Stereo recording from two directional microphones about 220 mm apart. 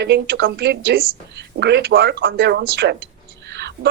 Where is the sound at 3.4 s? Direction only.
50° right (ahead or behind).